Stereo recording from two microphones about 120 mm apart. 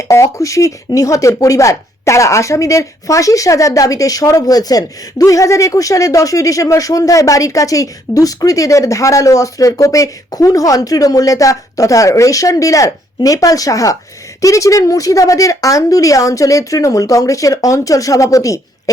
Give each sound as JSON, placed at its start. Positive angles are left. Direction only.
{"t": 0.0, "sound": "speech", "side_deg": 25}